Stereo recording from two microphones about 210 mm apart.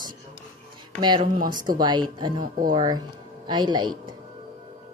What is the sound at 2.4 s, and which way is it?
Speech, 40° right (ahead or behind).